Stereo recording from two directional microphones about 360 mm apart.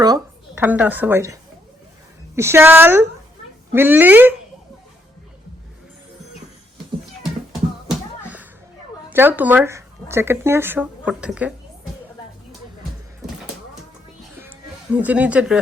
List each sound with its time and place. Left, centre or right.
0.0 s speech: centre
7.9 s a sound: centre
9.0 s speech: centre
14.9 s speech: centre